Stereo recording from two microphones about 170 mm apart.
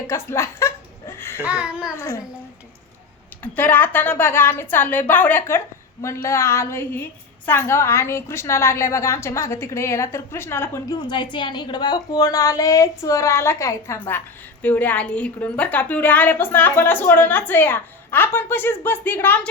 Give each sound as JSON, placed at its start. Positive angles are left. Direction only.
{"t": 0.1, "sound": "chuckle", "side_deg": 15}
{"t": 1.5, "sound": "a child's voice", "side_deg": -5}
{"t": 2.0, "sound": "a woman's voice", "side_deg": 15}
{"t": 3.4, "sound": "a woman's voice", "side_deg": 10}
{"t": 11.1, "sound": "a woman's voice", "side_deg": 25}